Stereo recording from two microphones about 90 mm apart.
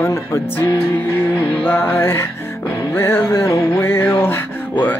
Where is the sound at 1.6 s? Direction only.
20° left (ahead or behind).